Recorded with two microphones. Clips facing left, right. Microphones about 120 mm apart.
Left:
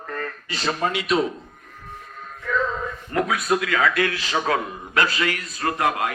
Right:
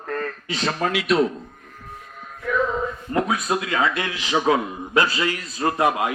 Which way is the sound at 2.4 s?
15° right (ahead or behind).